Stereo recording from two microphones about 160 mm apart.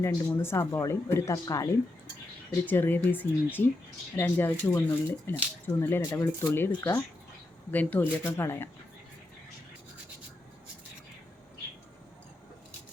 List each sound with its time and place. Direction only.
0.0 s speech: 15° left (ahead or behind)